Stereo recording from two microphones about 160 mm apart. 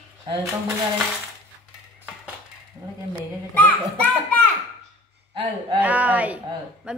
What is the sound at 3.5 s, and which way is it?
Speech, 10° left (ahead or behind).